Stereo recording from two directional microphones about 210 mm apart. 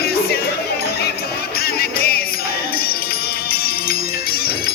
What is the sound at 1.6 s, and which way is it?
Music, 45° left (ahead or behind).